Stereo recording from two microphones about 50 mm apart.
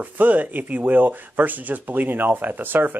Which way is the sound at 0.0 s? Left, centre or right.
Right.